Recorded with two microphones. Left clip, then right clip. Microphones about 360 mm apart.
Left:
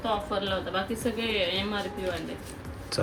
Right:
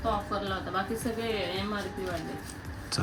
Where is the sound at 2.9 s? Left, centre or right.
Centre.